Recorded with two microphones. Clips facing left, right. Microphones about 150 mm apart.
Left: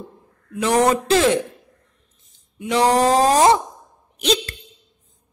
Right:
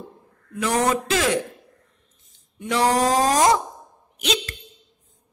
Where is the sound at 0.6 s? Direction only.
25° left (ahead or behind).